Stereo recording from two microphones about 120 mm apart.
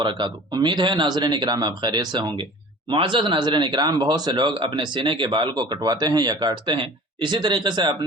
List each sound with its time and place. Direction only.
0.0 s speech: 45° right (ahead or behind)